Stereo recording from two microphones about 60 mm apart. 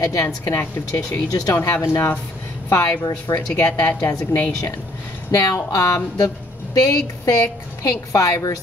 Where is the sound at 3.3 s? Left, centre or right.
Left.